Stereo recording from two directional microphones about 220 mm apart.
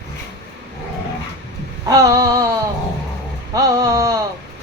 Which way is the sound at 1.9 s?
15° right (ahead or behind).